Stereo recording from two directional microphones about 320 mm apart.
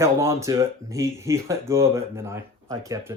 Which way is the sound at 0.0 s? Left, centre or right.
Centre.